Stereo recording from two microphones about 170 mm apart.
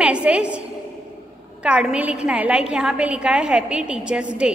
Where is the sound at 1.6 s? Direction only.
5° right (ahead or behind).